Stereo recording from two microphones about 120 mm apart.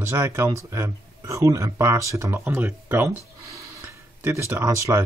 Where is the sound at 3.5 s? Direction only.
20° right (ahead or behind).